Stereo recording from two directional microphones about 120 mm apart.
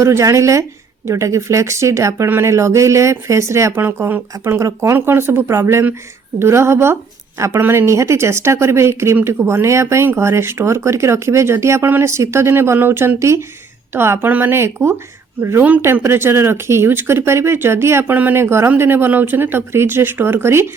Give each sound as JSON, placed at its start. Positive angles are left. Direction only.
{"t": 0.0, "sound": "speech", "side_deg": -25}